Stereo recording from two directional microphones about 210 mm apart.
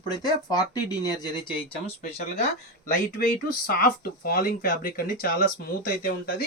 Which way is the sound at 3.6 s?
45° left (ahead or behind).